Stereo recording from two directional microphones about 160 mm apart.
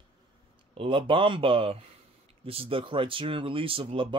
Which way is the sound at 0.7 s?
35° right (ahead or behind).